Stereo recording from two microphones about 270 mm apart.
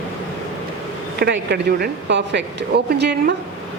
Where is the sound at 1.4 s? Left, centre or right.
Right.